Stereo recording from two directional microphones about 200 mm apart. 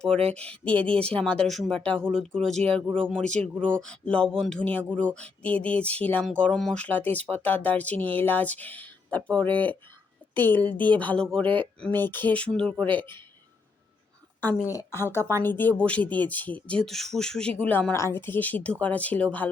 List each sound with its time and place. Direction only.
0.3 s a woman's voice: 5° left (ahead or behind)
12.9 s speech: 25° right (ahead or behind)
14.7 s speech: 15° left (ahead or behind)